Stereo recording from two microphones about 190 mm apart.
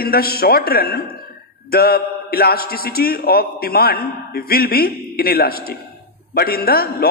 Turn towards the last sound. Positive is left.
turn(degrees=55)  # may be behind; listen again after turning